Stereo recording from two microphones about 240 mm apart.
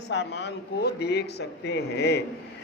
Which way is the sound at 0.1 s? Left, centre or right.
Left.